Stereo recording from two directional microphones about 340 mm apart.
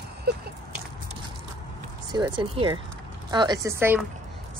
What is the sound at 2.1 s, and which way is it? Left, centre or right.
A woman's voice, centre.